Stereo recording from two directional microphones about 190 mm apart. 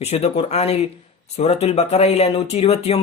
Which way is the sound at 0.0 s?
35° left (ahead or behind).